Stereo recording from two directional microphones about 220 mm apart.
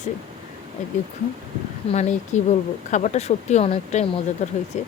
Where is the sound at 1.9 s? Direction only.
30° left (ahead or behind).